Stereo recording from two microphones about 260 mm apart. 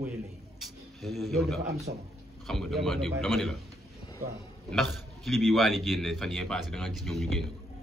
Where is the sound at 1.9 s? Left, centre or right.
Right.